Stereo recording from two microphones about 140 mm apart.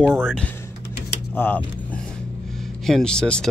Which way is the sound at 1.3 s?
15° left (ahead or behind).